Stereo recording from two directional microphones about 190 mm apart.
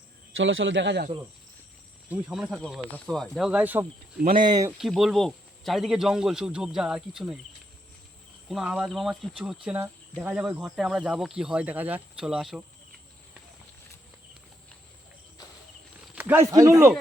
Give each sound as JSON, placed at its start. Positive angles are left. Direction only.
{"t": 0.3, "sound": "speech", "side_deg": -85}
{"t": 2.0, "sound": "speech", "side_deg": -5}
{"t": 4.4, "sound": "speech", "side_deg": -20}
{"t": 4.8, "sound": "speech", "side_deg": 0}
{"t": 8.4, "sound": "speech", "side_deg": -5}
{"t": 16.1, "sound": "speech", "side_deg": -10}